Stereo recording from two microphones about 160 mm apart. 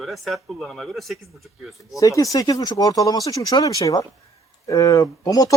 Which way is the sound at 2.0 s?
20° left (ahead or behind).